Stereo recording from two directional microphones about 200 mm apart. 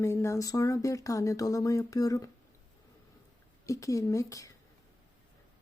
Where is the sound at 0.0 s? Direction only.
15° left (ahead or behind).